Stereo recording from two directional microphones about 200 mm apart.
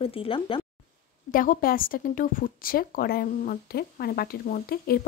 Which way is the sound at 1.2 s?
45° left (ahead or behind).